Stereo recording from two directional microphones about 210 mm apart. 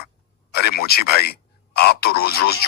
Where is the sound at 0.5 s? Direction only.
50° left (ahead or behind).